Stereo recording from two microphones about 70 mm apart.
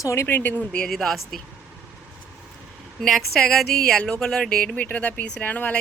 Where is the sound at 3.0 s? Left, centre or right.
Centre.